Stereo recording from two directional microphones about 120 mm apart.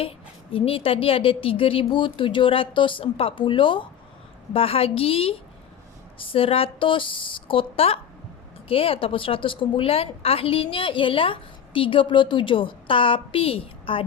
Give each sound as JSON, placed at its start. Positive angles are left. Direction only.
{"t": 0.5, "sound": "a woman's voice", "side_deg": 50}